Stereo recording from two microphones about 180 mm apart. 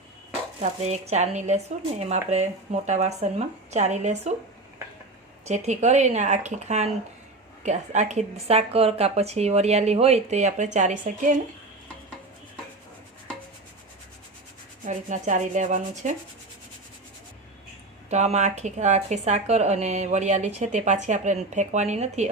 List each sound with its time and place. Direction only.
0.6 s a woman's voice: 40° right (ahead or behind)
5.5 s a woman's voice: 40° right (ahead or behind)
14.8 s rub: 45° right (ahead or behind)
18.1 s a woman's voice: 40° right (ahead or behind)